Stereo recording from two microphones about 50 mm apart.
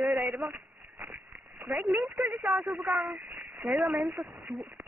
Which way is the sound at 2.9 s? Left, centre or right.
Centre.